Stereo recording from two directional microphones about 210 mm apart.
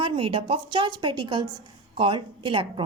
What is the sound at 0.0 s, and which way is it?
Speech, 25° right (ahead or behind).